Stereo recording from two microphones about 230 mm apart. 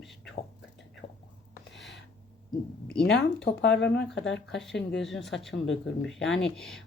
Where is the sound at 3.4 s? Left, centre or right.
Left.